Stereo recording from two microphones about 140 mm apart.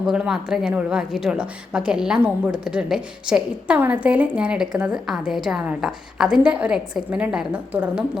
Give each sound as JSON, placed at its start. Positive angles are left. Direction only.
{"t": 0.1, "sound": "a woman's voice", "side_deg": -5}